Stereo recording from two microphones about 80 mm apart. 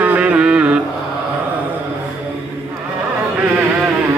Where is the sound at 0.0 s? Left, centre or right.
Centre.